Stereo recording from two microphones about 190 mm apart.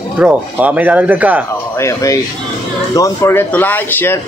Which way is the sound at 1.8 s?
15° left (ahead or behind).